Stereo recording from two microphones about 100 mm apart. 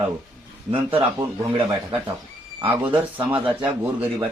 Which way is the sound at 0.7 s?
65° right (ahead or behind).